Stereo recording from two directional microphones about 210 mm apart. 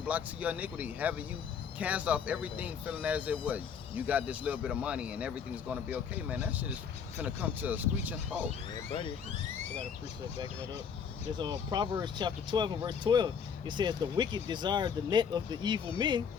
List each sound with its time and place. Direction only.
0.0 s speech: 5° right (ahead or behind)
11.3 s speech: 20° right (ahead or behind)